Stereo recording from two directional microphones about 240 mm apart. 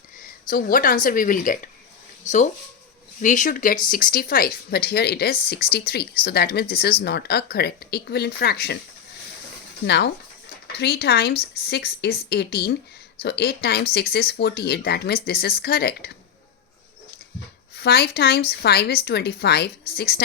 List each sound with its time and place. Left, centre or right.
0.4 s speech: left
3.2 s speech: left
9.8 s speech: left
17.7 s speech: left